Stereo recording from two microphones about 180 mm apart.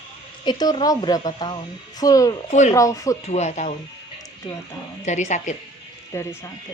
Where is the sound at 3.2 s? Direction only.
40° left (ahead or behind).